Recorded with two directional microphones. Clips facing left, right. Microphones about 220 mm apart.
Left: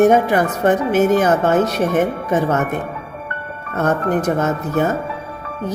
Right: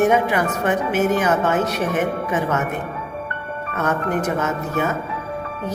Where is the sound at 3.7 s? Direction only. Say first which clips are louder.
Left 4 dB; 35° left (ahead or behind).